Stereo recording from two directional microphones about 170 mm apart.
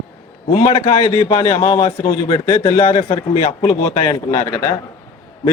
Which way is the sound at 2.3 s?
20° left (ahead or behind).